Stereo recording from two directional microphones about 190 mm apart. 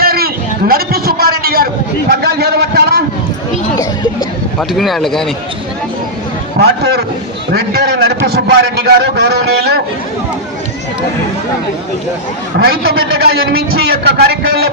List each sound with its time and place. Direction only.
0.0 s a sound: 55° right (ahead or behind)
2.0 s a man's voice: 55° right (ahead or behind)
4.7 s speech: centre (ahead or behind)
6.6 s a man's voice: 55° right (ahead or behind)
12.5 s a man's voice: 55° right (ahead or behind)